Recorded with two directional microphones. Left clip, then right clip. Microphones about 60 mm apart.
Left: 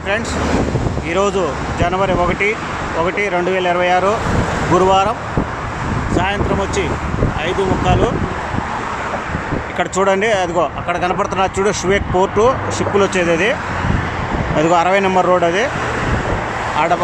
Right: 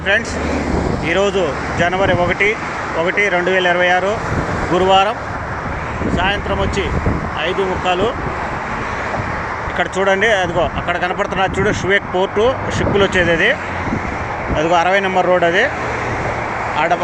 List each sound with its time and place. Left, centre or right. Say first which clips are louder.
1.1 s speech: even; left; by 5.1 s centre
6.1 s speech: even; left
9.7 s speech: even; left
10.8 s speech: left 1 dB; left
14.5 s speech: left 1 dB; left
15.2 s speech: right 1 dB; left
16.7 s speech: left 1 dB; left